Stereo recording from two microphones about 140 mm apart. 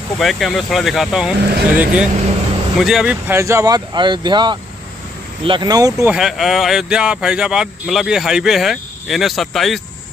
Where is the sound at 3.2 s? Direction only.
20° right (ahead or behind).